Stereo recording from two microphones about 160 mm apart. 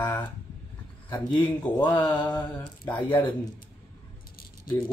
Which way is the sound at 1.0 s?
25° left (ahead or behind).